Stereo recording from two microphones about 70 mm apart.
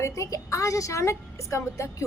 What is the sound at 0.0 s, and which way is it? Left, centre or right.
A woman's voice, left.